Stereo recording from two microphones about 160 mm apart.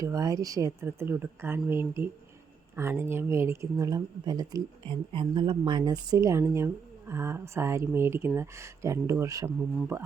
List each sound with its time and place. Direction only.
0.0 s speech: 20° right (ahead or behind)